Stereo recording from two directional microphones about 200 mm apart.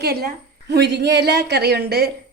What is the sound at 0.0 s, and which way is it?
A woman's voice, 50° right (ahead or behind).